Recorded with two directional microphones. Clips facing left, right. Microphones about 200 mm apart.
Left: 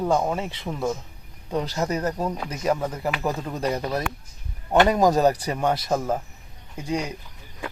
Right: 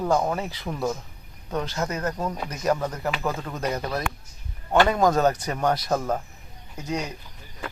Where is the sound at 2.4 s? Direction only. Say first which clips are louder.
Right 2 dB; 5° left (ahead or behind).